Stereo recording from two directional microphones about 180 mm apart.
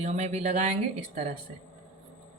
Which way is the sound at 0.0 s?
40° right (ahead or behind).